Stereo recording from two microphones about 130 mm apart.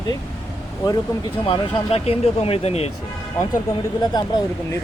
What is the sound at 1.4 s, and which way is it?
Speech, 40° left (ahead or behind).